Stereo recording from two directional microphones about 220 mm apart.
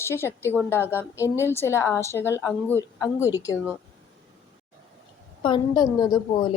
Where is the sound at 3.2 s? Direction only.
10° right (ahead or behind).